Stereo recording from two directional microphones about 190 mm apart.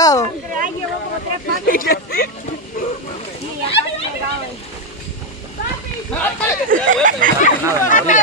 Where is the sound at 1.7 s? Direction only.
50° left (ahead or behind).